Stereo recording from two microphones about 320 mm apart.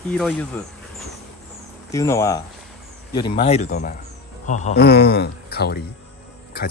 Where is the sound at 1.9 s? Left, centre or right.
Centre.